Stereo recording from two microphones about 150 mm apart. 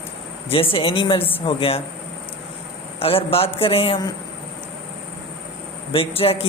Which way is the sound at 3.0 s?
40° left (ahead or behind).